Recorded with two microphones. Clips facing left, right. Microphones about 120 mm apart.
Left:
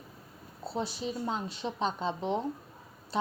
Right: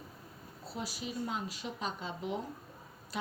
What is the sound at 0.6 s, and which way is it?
A woman's voice, 25° left (ahead or behind).